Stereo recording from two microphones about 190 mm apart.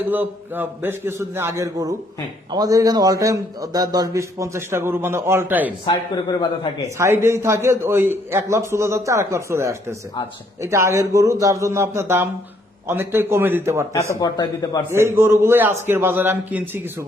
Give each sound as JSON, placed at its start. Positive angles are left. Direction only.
{"t": 0.1, "sound": "a man's voice", "side_deg": -10}
{"t": 5.8, "sound": "a man's voice", "side_deg": 25}
{"t": 6.8, "sound": "a man's voice", "side_deg": -15}
{"t": 13.9, "sound": "a man's voice", "side_deg": 15}
{"t": 14.8, "sound": "a man's voice", "side_deg": -15}